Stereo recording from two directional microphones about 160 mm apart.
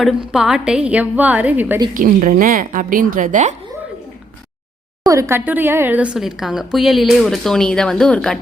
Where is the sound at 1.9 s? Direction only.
55° right (ahead or behind).